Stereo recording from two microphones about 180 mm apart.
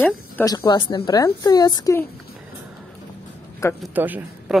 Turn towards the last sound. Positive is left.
turn(degrees=-10)  # may be behind; listen again after turning